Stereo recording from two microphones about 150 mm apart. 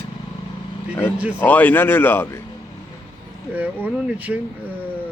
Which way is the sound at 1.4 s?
10° left (ahead or behind).